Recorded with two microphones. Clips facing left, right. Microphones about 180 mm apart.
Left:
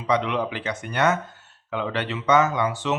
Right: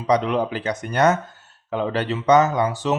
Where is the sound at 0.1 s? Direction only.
40° right (ahead or behind).